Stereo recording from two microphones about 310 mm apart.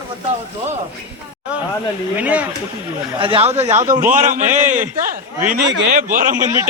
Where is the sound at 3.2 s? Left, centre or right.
Centre.